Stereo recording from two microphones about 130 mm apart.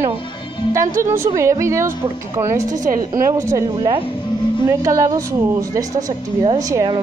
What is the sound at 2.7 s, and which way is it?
Speech, 90° right.